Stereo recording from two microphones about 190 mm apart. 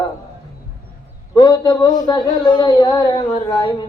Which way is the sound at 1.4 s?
20° left (ahead or behind).